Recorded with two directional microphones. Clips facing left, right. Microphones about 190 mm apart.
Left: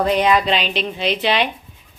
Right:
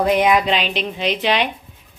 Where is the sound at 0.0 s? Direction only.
10° right (ahead or behind).